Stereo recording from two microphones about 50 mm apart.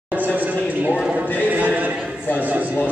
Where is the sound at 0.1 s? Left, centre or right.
Right.